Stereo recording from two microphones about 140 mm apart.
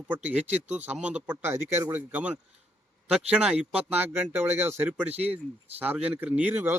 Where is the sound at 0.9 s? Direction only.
10° right (ahead or behind).